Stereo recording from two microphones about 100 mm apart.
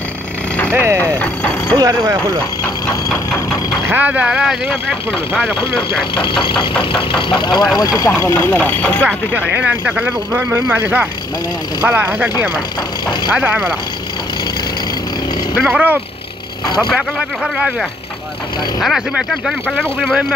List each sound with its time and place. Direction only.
0.7 s speech: 25° right (ahead or behind)
0.9 s music: 15° left (ahead or behind)
1.8 s speech: 35° right (ahead or behind)
2.6 s a sound: 25° left (ahead or behind)
3.9 s speech: 15° right (ahead or behind)
6.1 s speech: 55° left (ahead or behind)
7.7 s speech: 35° left (ahead or behind)
8.1 s chopping: 25° left (ahead or behind)
9.6 s speech: 15° right (ahead or behind)
11.8 s speech: 15° right (ahead or behind)
15.6 s speech: 15° right (ahead or behind)